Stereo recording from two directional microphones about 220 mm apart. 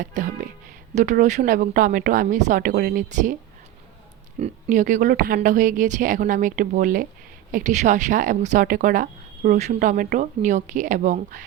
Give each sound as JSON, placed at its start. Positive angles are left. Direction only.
{"t": 0.0, "sound": "speech", "side_deg": -35}
{"t": 4.4, "sound": "speech", "side_deg": -30}